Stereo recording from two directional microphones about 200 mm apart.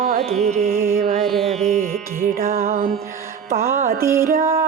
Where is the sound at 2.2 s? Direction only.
45° right (ahead or behind).